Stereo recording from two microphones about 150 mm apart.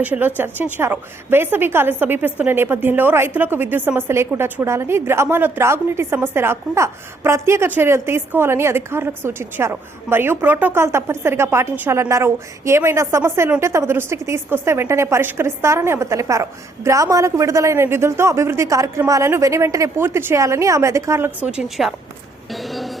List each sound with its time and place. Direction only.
0.0 s a woman's voice: 10° right (ahead or behind)
22.5 s vehicle: centre (ahead or behind)